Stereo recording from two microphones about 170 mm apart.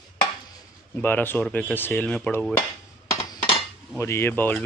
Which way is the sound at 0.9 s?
10° left (ahead or behind).